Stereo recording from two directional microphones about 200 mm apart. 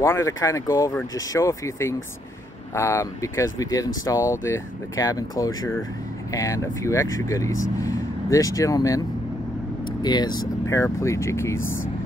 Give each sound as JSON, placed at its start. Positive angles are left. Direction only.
{"t": 0.0, "sound": "speech", "side_deg": 15}
{"t": 10.0, "sound": "speech", "side_deg": 20}